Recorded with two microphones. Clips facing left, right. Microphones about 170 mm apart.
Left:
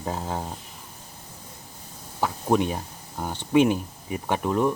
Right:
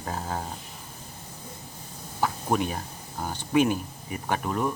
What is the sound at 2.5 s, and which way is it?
Speech, 20° left (ahead or behind).